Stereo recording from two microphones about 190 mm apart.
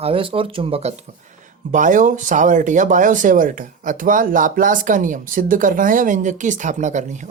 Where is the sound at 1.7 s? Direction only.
45° right (ahead or behind).